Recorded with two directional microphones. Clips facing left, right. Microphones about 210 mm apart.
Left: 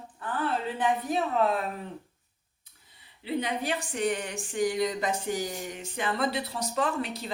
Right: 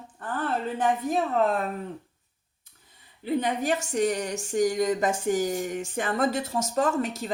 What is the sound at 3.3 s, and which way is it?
Speech, 45° right (ahead or behind).